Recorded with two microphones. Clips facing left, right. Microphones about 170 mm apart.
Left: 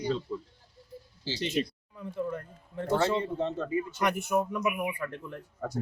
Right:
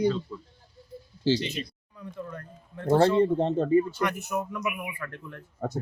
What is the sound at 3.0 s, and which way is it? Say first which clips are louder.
Speech: right 7 dB; 55° right (ahead or behind).